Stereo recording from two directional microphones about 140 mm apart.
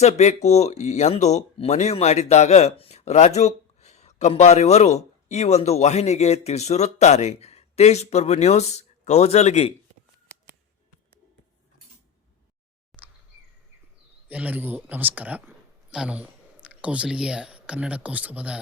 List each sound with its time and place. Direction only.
0.0 s speech: 55° left (ahead or behind)
12.9 s bird vocalization: centre (ahead or behind)
14.3 s speech: 10° right (ahead or behind)